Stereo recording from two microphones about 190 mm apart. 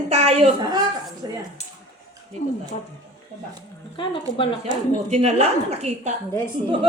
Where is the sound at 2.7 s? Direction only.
30° left (ahead or behind).